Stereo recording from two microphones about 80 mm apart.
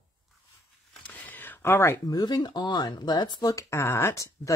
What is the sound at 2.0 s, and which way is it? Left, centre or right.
Speech, left.